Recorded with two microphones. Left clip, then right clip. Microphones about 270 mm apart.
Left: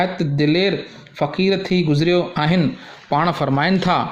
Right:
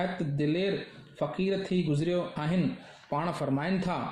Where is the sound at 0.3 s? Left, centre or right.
Left.